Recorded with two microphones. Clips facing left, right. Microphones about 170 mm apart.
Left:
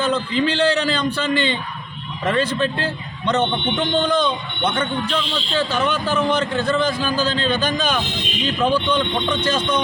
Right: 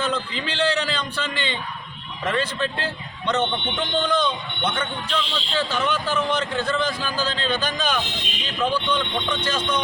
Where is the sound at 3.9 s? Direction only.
45° left (ahead or behind).